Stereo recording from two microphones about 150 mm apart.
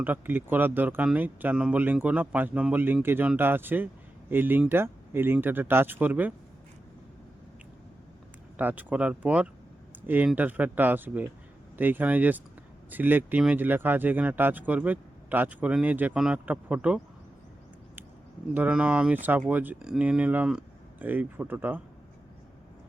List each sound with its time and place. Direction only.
0.0 s speech: 10° right (ahead or behind)
8.5 s speech: 10° right (ahead or behind)
18.5 s speech: 10° right (ahead or behind)